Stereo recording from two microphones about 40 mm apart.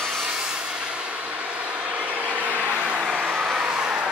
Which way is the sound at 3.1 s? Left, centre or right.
Right.